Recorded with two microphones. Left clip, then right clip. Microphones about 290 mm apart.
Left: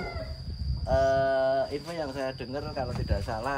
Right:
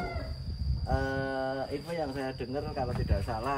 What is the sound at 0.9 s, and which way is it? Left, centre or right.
Speech, centre.